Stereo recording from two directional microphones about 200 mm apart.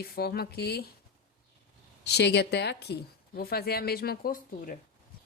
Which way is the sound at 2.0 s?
55° left (ahead or behind).